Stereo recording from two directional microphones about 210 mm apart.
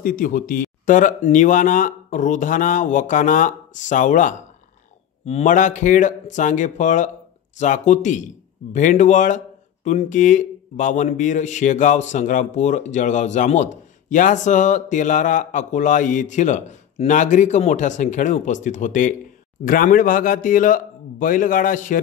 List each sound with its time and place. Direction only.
0.0 s speech: 40° left (ahead or behind)